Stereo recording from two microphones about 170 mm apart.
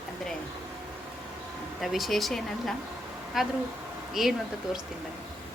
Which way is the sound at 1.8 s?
Centre (ahead or behind).